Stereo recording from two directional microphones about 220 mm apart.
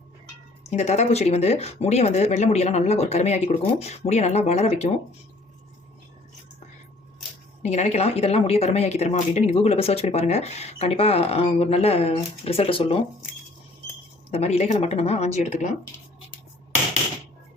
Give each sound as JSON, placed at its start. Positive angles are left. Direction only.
{"t": 0.6, "sound": "a woman's voice", "side_deg": 30}
{"t": 7.6, "sound": "a woman's voice", "side_deg": 30}
{"t": 14.3, "sound": "a woman's voice", "side_deg": 25}